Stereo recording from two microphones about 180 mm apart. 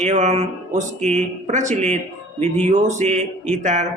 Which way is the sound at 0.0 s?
40° right (ahead or behind).